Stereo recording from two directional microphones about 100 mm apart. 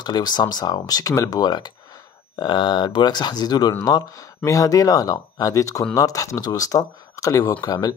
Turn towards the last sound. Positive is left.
turn(degrees=40)  # may be behind; listen again after turning